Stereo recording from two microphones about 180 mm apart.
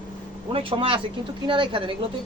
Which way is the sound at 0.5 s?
30° right (ahead or behind).